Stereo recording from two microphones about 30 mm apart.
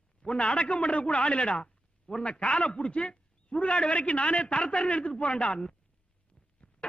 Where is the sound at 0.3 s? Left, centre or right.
Left.